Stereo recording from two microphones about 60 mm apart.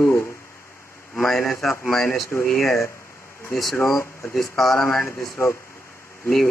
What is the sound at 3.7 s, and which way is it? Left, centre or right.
Speech, left.